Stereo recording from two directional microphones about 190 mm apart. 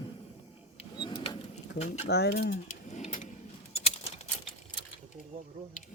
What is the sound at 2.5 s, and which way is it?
Sewing machine, 40° left (ahead or behind).